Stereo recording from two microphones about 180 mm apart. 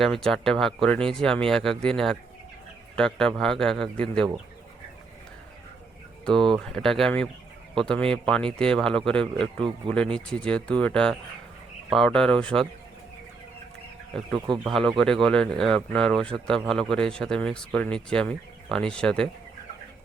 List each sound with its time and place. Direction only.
0.0 s speech: centre (ahead or behind)
6.6 s speech: 5° left (ahead or behind)
14.3 s speech: 25° right (ahead or behind)
14.6 s speech: centre (ahead or behind)